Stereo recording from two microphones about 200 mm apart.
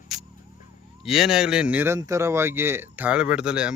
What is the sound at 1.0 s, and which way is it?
Speech, centre (ahead or behind).